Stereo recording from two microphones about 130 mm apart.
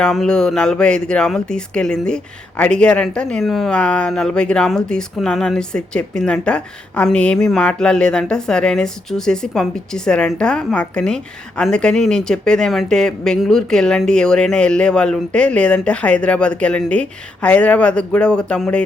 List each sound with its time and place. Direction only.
0.0 s speech: 5° left (ahead or behind)